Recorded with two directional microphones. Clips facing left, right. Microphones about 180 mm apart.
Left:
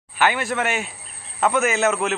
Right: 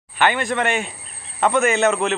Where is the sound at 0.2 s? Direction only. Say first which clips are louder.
Right 2 dB; 5° left (ahead or behind).